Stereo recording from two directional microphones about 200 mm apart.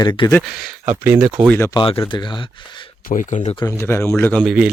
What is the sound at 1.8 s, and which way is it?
Speech, 25° left (ahead or behind).